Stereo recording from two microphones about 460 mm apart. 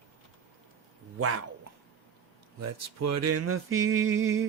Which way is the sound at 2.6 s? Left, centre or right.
Right.